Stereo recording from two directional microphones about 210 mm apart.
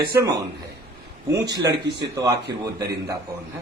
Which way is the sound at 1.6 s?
55° right (ahead or behind).